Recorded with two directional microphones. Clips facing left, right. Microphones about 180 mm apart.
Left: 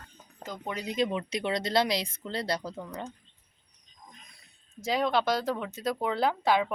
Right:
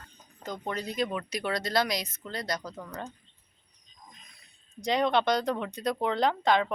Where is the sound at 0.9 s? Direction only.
25° left (ahead or behind).